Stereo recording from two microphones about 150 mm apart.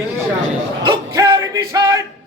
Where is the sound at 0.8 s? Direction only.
25° right (ahead or behind).